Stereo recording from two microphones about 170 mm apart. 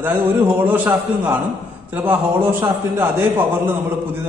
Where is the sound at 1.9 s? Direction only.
10° right (ahead or behind).